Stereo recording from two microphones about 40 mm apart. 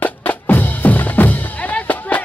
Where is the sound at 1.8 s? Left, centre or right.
Left.